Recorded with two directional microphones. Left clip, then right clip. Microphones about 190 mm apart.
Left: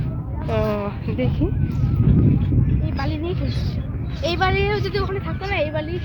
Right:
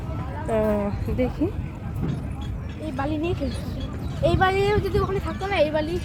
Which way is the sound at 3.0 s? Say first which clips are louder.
Right 3 dB; 15° right (ahead or behind).